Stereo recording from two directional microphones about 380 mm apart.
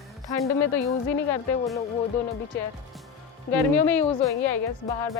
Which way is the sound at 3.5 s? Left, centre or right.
Left.